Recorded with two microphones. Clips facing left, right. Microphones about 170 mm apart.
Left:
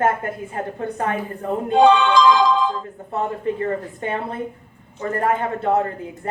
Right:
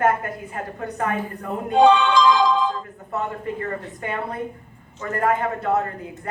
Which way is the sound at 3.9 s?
25° left (ahead or behind).